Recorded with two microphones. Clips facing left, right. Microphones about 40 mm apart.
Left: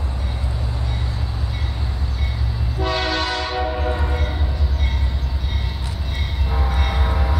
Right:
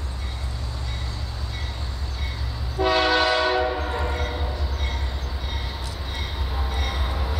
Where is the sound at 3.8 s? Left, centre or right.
Centre.